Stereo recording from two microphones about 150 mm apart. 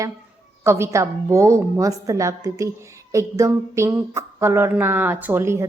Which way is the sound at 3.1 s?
20° right (ahead or behind).